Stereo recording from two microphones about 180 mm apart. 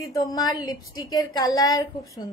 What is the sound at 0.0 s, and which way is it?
A woman's voice, 20° left (ahead or behind).